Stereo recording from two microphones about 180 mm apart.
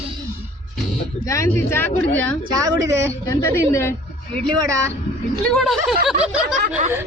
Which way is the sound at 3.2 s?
15° left (ahead or behind).